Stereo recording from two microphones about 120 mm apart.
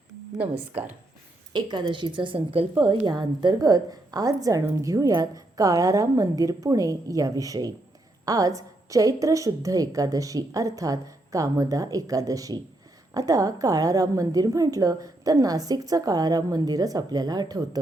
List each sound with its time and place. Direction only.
1.5 s a woman's voice: 35° right (ahead or behind)
2.8 s a woman's voice: 35° right (ahead or behind)